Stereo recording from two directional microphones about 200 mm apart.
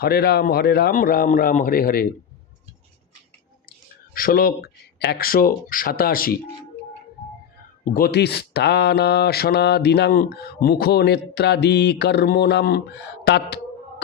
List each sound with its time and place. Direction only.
0.0 s speech: 50° left (ahead or behind)
4.1 s speech: 45° left (ahead or behind)
7.9 s speech: 45° left (ahead or behind)